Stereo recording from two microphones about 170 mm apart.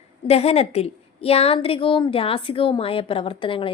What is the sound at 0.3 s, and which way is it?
A woman's voice, 35° left (ahead or behind).